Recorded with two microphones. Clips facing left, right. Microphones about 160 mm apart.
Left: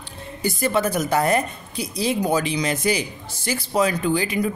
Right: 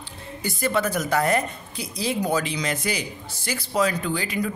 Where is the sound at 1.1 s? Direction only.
20° left (ahead or behind).